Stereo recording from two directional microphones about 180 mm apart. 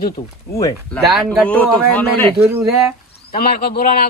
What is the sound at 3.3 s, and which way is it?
Speech, 55° left (ahead or behind).